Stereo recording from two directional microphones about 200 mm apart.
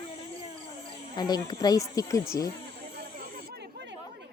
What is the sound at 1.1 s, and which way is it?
Speech, 20° left (ahead or behind).